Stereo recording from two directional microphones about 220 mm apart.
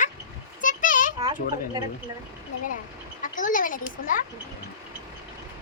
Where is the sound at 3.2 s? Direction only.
35° left (ahead or behind).